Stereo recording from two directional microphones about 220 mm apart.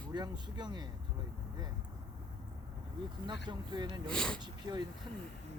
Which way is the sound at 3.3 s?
20° right (ahead or behind).